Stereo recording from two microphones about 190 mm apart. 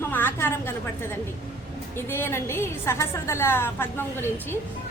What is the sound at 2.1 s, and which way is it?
A woman's voice, 10° left (ahead or behind).